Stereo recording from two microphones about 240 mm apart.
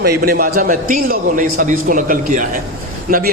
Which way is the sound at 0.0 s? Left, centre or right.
Right.